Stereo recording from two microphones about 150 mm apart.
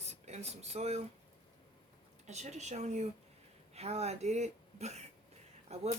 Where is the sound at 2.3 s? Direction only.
50° right (ahead or behind).